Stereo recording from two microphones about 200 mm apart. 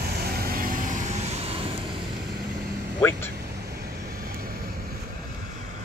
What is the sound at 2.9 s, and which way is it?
Speech, 10° left (ahead or behind).